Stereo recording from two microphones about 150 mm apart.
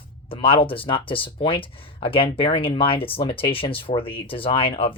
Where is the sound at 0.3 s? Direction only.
35° left (ahead or behind).